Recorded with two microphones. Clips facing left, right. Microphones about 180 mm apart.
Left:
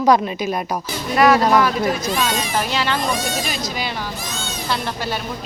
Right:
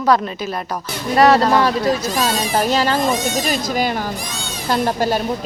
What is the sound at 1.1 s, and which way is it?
Speech, 35° right (ahead or behind).